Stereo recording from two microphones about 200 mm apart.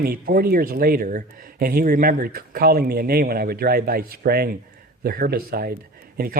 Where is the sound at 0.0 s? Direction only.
45° right (ahead or behind).